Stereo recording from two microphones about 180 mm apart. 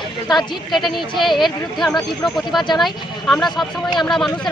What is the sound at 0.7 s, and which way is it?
A man's voice, centre (ahead or behind).